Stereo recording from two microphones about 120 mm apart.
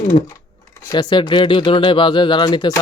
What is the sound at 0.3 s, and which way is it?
Speech, 25° left (ahead or behind).